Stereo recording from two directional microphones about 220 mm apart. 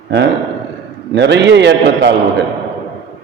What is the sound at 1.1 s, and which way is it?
A man's voice, 50° right (ahead or behind).